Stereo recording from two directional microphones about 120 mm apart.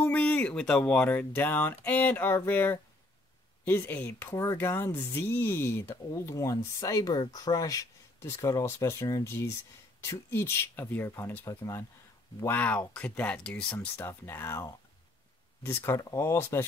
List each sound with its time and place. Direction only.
0.0 s speech: 15° left (ahead or behind)
12.4 s speech: 10° left (ahead or behind)
13.7 s speech: 20° left (ahead or behind)